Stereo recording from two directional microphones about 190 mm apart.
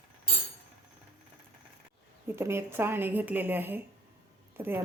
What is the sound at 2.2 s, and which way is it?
A woman's voice, 15° right (ahead or behind).